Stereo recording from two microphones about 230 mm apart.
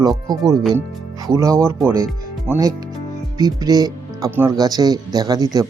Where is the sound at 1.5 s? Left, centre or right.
Centre.